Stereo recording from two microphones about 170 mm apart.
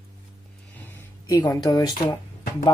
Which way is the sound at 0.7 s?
15° left (ahead or behind).